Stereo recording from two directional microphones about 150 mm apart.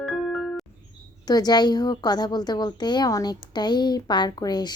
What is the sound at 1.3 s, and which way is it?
A woman's voice, 25° left (ahead or behind).